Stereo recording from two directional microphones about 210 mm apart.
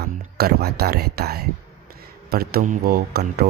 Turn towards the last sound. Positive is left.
turn(degrees=-50)  # may be behind; listen again after turning